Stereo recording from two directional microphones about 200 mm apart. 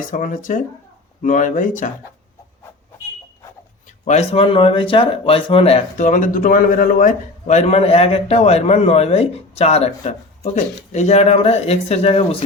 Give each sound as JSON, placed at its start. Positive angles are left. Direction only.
{"t": 0.1, "sound": "speech", "side_deg": 40}
{"t": 4.0, "sound": "speech", "side_deg": 35}